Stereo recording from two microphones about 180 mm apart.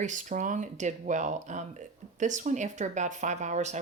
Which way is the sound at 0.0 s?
45° right (ahead or behind).